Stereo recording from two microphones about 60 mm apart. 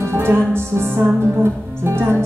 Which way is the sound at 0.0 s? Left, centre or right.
Right.